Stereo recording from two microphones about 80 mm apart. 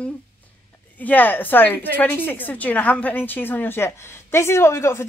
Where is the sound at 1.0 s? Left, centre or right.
Left.